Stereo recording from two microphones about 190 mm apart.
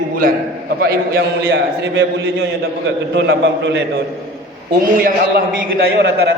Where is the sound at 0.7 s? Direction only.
60° right (ahead or behind).